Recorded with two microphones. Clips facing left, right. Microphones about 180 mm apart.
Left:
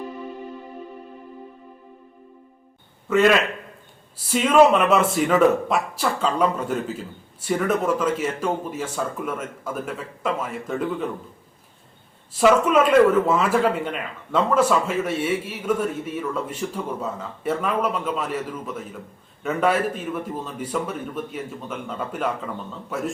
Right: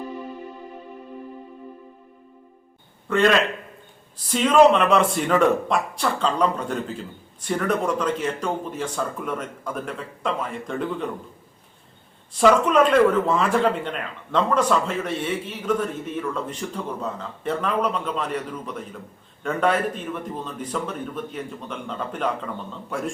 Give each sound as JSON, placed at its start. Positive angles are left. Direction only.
{"t": 3.1, "sound": "speech", "side_deg": 5}
{"t": 12.4, "sound": "speech", "side_deg": 5}